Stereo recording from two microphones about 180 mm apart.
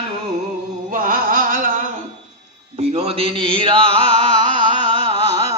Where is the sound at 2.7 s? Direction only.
35° right (ahead or behind).